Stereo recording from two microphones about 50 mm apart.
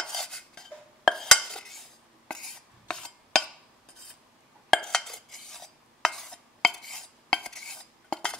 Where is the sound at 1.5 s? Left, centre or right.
Centre.